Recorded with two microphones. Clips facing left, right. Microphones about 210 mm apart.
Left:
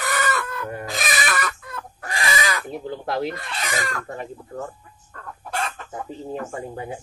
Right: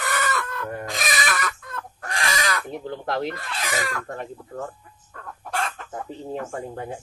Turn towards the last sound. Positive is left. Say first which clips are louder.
# even
turn(degrees=5)  # may be behind; listen again after turning